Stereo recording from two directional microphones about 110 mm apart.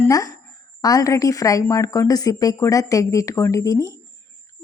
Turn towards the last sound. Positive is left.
turn(degrees=30)  # may be behind; listen again after turning